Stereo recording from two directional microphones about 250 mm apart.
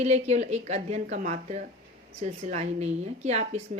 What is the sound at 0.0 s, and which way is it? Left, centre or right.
A woman's voice, right.